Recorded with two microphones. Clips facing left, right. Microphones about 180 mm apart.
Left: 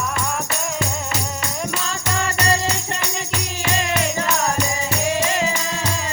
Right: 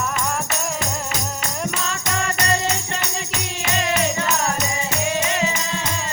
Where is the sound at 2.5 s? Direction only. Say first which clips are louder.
Left 1 dB; 35° left (ahead or behind).